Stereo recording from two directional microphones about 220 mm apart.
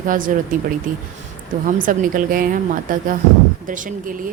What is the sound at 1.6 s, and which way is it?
Speech, 35° right (ahead or behind).